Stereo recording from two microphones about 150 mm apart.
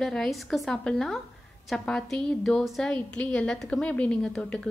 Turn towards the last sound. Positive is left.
turn(degrees=5)  # may be behind; listen again after turning